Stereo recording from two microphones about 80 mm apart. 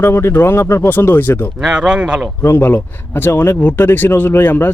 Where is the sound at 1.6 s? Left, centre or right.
Centre.